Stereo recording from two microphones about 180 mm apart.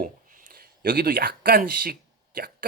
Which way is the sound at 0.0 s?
50° right (ahead or behind).